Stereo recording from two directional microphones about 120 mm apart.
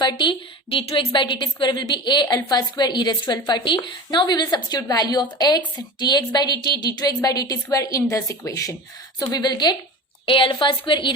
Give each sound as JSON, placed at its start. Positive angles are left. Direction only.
{"t": 0.0, "sound": "a woman's voice", "side_deg": 40}